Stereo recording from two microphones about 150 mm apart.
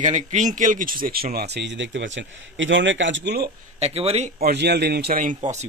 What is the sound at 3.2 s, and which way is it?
Speech, 90° right.